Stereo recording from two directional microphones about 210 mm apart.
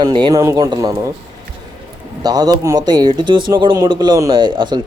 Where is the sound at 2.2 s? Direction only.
20° right (ahead or behind).